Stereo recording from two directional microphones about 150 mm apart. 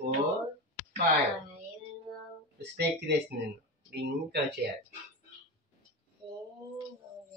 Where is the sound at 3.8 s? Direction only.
90° right.